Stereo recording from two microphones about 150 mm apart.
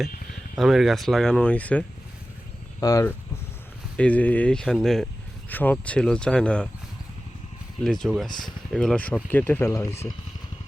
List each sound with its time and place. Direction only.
0.5 s speech: centre (ahead or behind)
2.8 s speech: 20° left (ahead or behind)
3.9 s speech: 10° left (ahead or behind)
7.9 s speech: 5° left (ahead or behind); by 10.0 s 20° left (ahead or behind)